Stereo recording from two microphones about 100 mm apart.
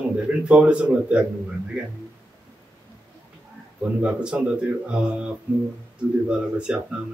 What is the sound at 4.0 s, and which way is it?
Speech, 10° right (ahead or behind).